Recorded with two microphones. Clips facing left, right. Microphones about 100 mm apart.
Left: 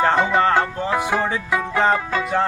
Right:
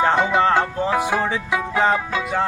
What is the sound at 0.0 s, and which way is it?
Music, 10° right (ahead or behind).